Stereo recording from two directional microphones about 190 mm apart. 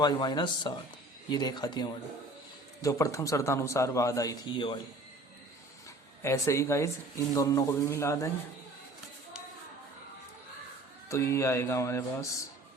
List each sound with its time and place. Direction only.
0.0 s a man's voice: 25° left (ahead or behind)
6.2 s a man's voice: 15° left (ahead or behind)
11.1 s a man's voice: 15° left (ahead or behind)